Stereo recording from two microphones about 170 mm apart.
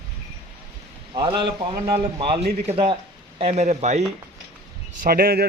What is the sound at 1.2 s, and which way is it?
A man's voice, 25° right (ahead or behind).